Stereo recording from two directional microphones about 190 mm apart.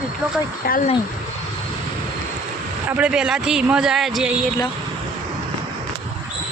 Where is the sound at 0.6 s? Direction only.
50° left (ahead or behind).